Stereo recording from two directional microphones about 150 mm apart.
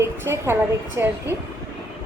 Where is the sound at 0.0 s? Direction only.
15° right (ahead or behind).